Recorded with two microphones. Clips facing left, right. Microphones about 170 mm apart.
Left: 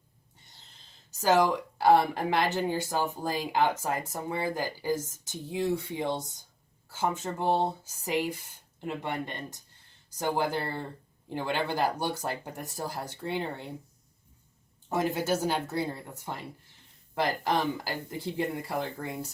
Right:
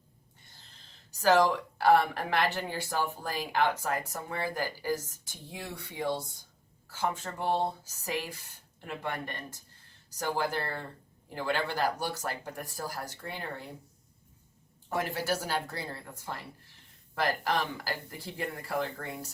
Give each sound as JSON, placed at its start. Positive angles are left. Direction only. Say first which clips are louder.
{"t": 0.6, "sound": "speech", "louder": "right 1 dB", "side_deg": 20}
{"t": 14.8, "sound": "speech", "louder": "left 4 dB", "side_deg": 20}